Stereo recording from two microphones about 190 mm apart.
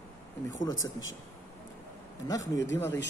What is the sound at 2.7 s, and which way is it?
Speech, 15° left (ahead or behind).